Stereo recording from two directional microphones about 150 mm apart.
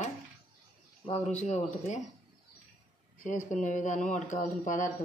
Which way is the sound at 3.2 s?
55° left (ahead or behind).